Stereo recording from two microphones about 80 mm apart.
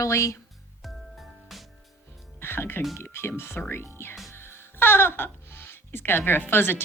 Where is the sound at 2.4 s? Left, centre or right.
Left.